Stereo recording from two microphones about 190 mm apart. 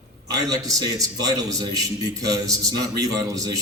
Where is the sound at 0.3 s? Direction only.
20° right (ahead or behind).